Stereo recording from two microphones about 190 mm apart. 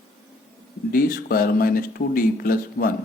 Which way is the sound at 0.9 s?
50° left (ahead or behind).